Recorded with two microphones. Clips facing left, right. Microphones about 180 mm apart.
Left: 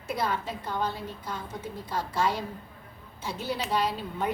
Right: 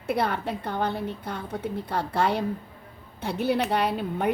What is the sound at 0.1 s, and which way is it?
A woman's voice, 60° right (ahead or behind).